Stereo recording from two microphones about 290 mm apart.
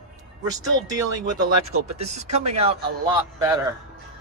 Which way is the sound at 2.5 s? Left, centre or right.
Centre.